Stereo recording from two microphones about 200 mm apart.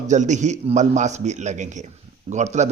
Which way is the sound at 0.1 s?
35° right (ahead or behind).